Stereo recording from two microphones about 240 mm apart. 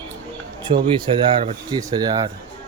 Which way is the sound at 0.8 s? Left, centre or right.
Right.